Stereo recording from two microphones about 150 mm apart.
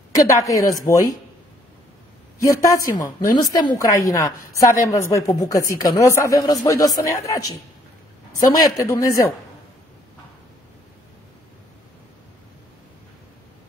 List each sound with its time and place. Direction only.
0.1 s a woman's voice: 20° left (ahead or behind)
2.4 s a woman's voice: 25° left (ahead or behind)